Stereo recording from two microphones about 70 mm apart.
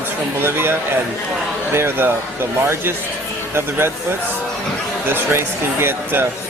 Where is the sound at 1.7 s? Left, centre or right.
Right.